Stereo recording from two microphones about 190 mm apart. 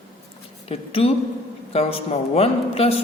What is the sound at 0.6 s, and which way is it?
A woman's voice, 30° left (ahead or behind).